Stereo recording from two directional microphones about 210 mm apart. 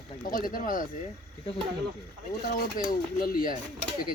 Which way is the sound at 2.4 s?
45° left (ahead or behind).